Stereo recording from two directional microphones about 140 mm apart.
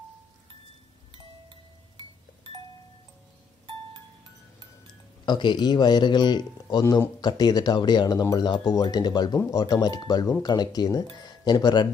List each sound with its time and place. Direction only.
1.1 s music: 40° right (ahead or behind)
5.2 s a man's voice: 35° left (ahead or behind)
6.8 s speech: 20° left (ahead or behind)
7.2 s speech: 30° left (ahead or behind)